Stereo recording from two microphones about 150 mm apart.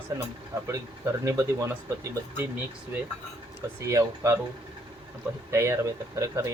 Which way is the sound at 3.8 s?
20° right (ahead or behind).